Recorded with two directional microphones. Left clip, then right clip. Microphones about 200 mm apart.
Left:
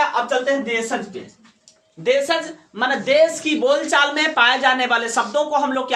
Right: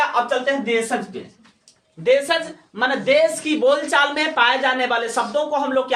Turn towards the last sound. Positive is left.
turn(degrees=25)  # may be behind; listen again after turning